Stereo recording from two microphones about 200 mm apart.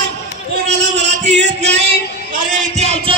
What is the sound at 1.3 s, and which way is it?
Music, 60° right (ahead or behind).